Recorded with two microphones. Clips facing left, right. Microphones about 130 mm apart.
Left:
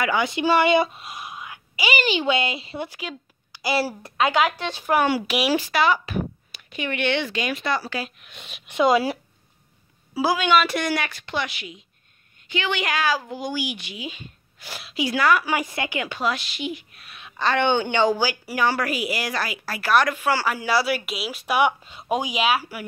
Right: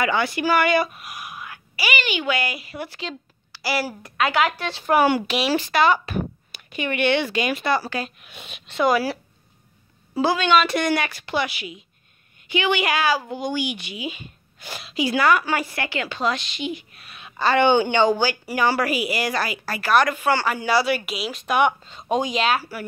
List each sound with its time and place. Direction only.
0.1 s a child's voice: 20° left (ahead or behind)
2.9 s a sound: 10° left (ahead or behind)
3.6 s a woman's voice: 25° left (ahead or behind)
4.8 s a woman's voice: centre (ahead or behind)
8.6 s a woman's voice: 20° left (ahead or behind)
10.1 s a woman's voice: 10° left (ahead or behind)
15.5 s a woman's voice: 20° left (ahead or behind)